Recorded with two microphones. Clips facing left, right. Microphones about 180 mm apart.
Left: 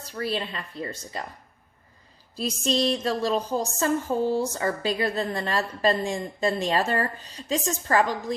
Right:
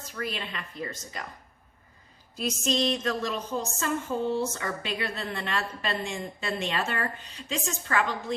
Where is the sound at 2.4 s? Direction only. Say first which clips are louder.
Left 2 dB; 35° left (ahead or behind).